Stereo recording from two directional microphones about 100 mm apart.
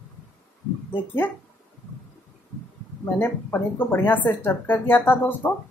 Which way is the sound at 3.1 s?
20° left (ahead or behind).